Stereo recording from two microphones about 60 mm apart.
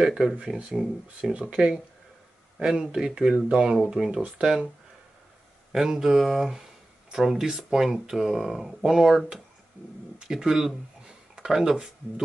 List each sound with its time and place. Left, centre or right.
0.0 s speech: centre
5.7 s speech: centre